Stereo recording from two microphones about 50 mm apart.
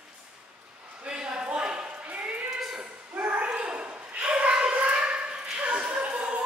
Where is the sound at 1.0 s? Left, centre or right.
Centre.